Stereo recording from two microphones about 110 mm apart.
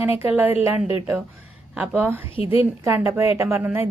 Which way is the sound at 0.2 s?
15° right (ahead or behind).